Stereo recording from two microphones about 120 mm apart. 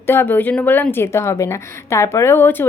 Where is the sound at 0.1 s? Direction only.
15° left (ahead or behind).